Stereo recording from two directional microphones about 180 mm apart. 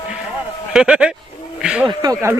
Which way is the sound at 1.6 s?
5° right (ahead or behind).